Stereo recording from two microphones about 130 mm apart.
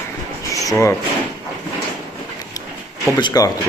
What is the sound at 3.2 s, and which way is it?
Speech, 30° left (ahead or behind).